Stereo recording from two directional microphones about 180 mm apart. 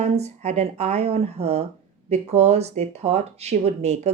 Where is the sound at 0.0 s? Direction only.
35° right (ahead or behind).